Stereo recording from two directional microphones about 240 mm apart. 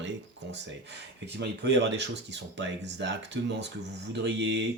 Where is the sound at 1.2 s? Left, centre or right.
Right.